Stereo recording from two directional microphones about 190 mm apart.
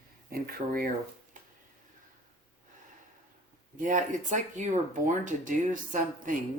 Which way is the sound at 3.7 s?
45° right (ahead or behind).